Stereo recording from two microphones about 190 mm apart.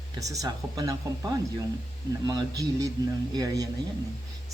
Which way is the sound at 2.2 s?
20° right (ahead or behind).